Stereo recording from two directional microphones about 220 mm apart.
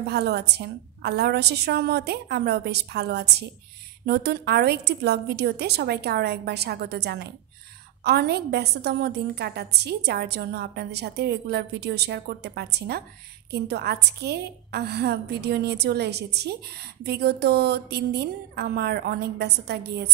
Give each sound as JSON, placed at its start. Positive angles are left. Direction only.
{"t": 0.1, "sound": "a woman's voice", "side_deg": -50}